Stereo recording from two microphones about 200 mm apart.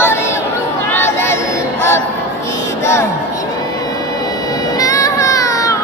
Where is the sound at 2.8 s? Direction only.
15° left (ahead or behind).